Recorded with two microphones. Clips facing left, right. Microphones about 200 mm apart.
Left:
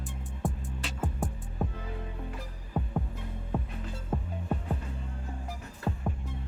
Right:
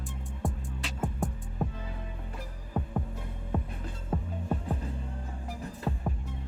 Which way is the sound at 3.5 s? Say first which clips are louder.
Even; centre (ahead or behind).